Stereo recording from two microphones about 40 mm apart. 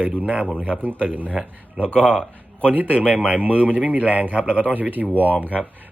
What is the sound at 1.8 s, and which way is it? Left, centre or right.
Speech, left.